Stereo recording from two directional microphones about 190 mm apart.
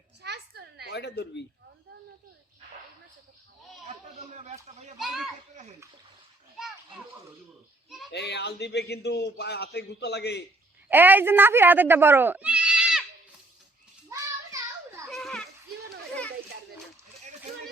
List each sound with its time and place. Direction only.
0.2 s a sound: 60° right (ahead or behind)
0.9 s speech: 60° left (ahead or behind)
3.8 s a sound: 40° right (ahead or behind)
4.9 s speech: centre (ahead or behind)
8.1 s a man's voice: 65° left (ahead or behind)
10.8 s speech: 10° right (ahead or behind)
14.1 s child singing: 15° right (ahead or behind)
15.1 s children playing: centre (ahead or behind)